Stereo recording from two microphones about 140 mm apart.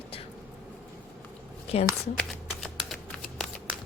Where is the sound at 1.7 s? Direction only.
45° left (ahead or behind).